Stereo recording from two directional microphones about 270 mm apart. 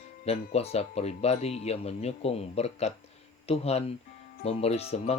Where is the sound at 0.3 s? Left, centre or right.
Left.